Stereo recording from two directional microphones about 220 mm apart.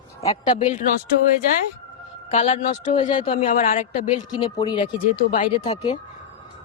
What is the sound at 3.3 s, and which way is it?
Speech, 35° left (ahead or behind).